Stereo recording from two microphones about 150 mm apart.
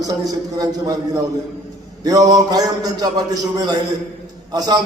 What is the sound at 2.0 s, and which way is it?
A man's voice, 25° right (ahead or behind).